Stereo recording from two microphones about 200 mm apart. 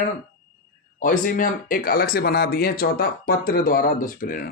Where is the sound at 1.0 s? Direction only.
40° left (ahead or behind).